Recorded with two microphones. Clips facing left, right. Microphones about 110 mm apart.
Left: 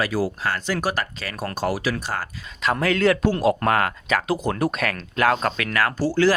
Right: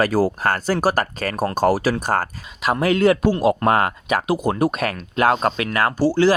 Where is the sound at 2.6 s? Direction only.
20° right (ahead or behind).